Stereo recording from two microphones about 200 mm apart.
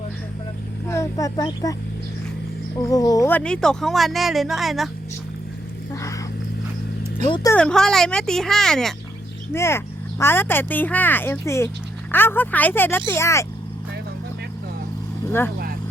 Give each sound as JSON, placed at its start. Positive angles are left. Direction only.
{"t": 0.9, "sound": "speech", "side_deg": 15}
{"t": 2.7, "sound": "speech", "side_deg": 15}
{"t": 5.9, "sound": "a sound", "side_deg": 15}
{"t": 7.3, "sound": "speech", "side_deg": 25}
{"t": 7.5, "sound": "speech", "side_deg": 5}
{"t": 9.5, "sound": "speech", "side_deg": 10}